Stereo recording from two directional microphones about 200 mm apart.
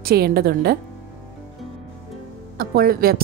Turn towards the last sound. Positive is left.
turn(degrees=-50)  # may be behind; listen again after turning